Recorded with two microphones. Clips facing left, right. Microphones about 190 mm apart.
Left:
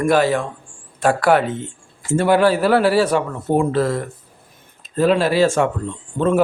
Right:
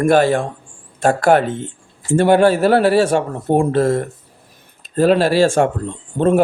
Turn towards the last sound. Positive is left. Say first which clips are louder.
# right 2 dB
turn(degrees=-55)  # may be behind; listen again after turning